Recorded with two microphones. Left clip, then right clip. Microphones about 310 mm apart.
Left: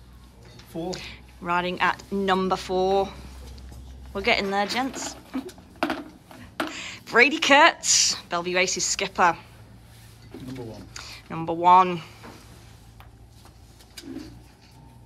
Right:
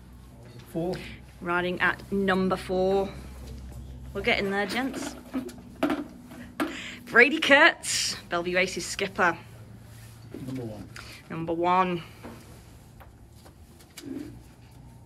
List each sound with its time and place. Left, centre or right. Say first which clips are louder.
0.8 s speech: even; centre
10.9 s speech: left 3 dB; centre